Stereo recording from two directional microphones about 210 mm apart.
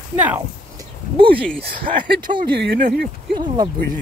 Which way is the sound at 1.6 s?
50° right (ahead or behind).